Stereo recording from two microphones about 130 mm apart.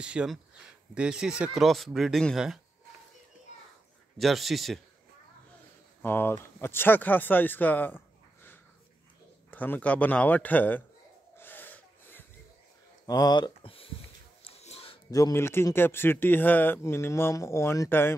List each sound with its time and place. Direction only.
0.0 s speech: 10° right (ahead or behind)
4.2 s speech: centre (ahead or behind)
6.0 s speech: 15° left (ahead or behind)
9.5 s speech: 15° left (ahead or behind)
11.3 s wheeze: 15° left (ahead or behind)
13.0 s speech: 30° left (ahead or behind)
14.4 s a sound: 55° left (ahead or behind)
15.0 s speech: 25° left (ahead or behind)